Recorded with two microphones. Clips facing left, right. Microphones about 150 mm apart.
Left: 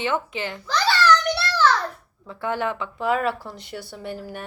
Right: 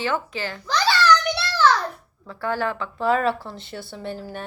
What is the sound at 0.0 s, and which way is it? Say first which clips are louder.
Speech: even; 20° left (ahead or behind).